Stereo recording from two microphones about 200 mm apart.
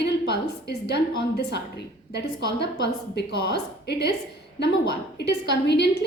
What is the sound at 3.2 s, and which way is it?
A woman's voice, 55° left (ahead or behind).